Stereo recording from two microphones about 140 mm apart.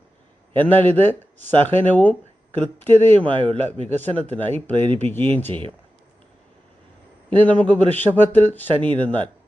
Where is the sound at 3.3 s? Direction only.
40° right (ahead or behind).